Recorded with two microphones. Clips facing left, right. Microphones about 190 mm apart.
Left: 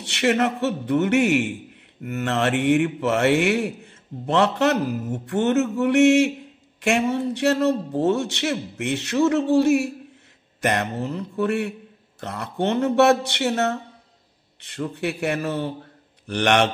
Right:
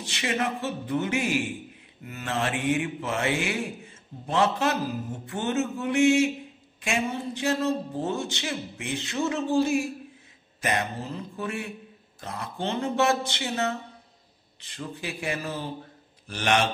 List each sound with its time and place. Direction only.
0.0 s mantra: 70° left (ahead or behind)